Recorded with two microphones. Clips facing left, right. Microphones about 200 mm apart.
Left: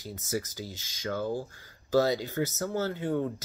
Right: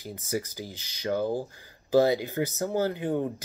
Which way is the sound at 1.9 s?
15° right (ahead or behind).